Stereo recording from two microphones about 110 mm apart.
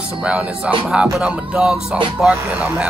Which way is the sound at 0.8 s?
5° right (ahead or behind).